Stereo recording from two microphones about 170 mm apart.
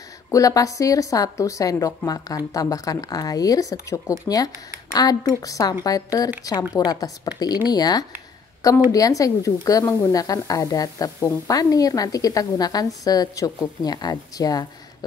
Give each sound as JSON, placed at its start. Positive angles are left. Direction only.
{"t": 0.3, "sound": "speech", "side_deg": 20}